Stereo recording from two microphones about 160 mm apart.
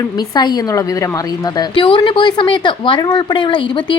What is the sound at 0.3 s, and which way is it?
Speech, 25° left (ahead or behind).